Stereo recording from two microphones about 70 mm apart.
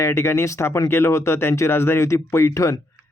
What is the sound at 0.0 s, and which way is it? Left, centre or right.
Speech, left.